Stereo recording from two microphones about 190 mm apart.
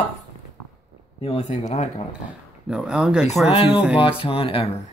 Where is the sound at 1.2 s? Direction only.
35° left (ahead or behind).